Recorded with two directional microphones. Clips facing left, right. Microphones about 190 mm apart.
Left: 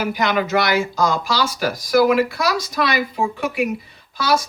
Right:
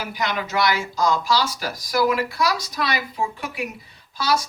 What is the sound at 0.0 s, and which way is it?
Speech, 65° left (ahead or behind).